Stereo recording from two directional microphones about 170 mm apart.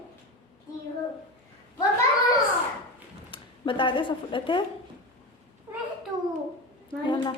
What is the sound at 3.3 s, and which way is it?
Speech, 30° left (ahead or behind).